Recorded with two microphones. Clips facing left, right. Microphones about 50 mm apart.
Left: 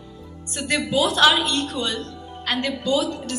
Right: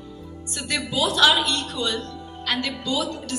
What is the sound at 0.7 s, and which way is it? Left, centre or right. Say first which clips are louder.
A woman's voice: left 3 dB; left.